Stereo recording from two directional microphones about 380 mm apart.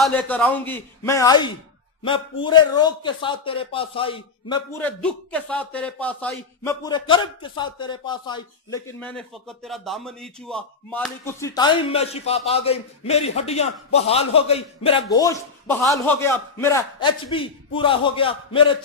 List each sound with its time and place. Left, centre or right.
0.0 s a man's voice: centre